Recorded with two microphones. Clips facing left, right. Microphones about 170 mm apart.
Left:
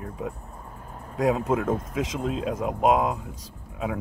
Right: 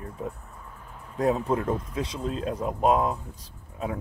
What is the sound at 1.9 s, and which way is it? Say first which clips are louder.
Speech: left 3 dB; 90° left.